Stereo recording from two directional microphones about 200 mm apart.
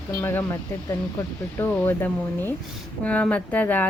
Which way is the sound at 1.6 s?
10° left (ahead or behind).